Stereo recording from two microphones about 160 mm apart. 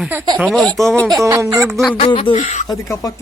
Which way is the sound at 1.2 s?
20° right (ahead or behind).